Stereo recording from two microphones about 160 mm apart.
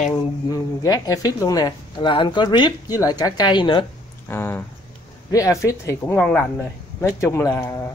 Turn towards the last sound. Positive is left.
turn(degrees=20)  # may be behind; listen again after turning